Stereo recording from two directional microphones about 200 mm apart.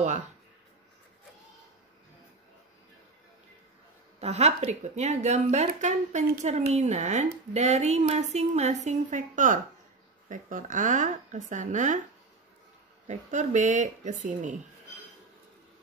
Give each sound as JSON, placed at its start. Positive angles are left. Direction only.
{"t": 4.2, "sound": "speech", "side_deg": -30}
{"t": 13.0, "sound": "speech", "side_deg": -35}